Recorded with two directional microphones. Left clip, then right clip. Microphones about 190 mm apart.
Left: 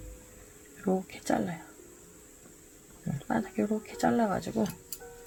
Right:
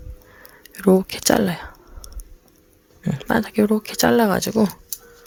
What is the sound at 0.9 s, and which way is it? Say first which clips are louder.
Speech: right 14 dB; 60° right (ahead or behind).